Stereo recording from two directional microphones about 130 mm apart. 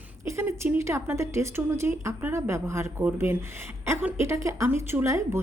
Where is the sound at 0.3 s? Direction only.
20° right (ahead or behind).